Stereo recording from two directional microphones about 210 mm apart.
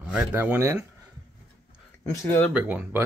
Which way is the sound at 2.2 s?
10° left (ahead or behind).